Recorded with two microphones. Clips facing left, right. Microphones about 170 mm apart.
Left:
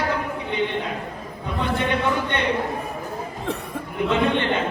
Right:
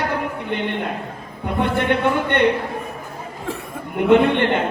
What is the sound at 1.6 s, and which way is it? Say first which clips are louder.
Speech: right 4 dB; 60° right (ahead or behind).